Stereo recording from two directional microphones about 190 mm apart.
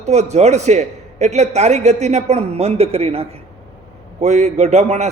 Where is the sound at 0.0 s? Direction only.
35° right (ahead or behind).